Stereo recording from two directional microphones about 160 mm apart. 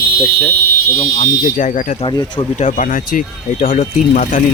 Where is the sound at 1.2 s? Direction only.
55° left (ahead or behind).